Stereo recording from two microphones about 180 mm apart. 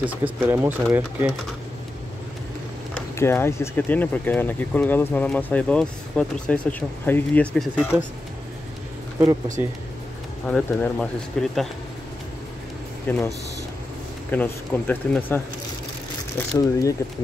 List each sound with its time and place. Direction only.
0.0 s speech: 10° right (ahead or behind)
3.2 s speech: 15° left (ahead or behind); by 8.0 s 5° right (ahead or behind)
9.2 s speech: 20° right (ahead or behind)
10.4 s speech: 5° left (ahead or behind)
13.1 s speech: 10° left (ahead or behind)
14.3 s speech: 10° left (ahead or behind)